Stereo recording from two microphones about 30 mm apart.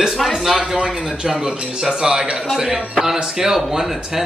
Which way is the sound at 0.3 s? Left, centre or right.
Centre.